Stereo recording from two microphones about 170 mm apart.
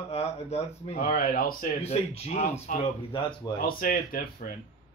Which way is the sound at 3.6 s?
60° left (ahead or behind).